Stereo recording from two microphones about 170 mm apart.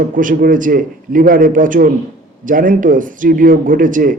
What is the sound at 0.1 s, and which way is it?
A man's voice, 55° right (ahead or behind).